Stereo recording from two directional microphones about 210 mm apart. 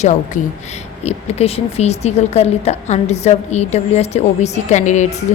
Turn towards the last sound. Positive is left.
turn(degrees=30)  # may be behind; listen again after turning